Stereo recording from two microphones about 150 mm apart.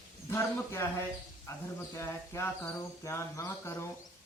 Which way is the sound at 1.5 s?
20° left (ahead or behind).